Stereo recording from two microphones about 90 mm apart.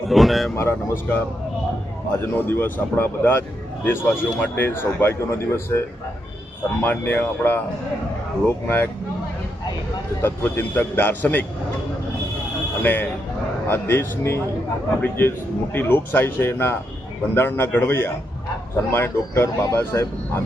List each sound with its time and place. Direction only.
0.1 s speech: centre (ahead or behind)
0.5 s speech: 25° left (ahead or behind)
6.8 s speech: 20° left (ahead or behind)
10.2 s speech: 25° left (ahead or behind)
12.8 s speech: 20° left (ahead or behind)
15.0 s speech: 25° left (ahead or behind)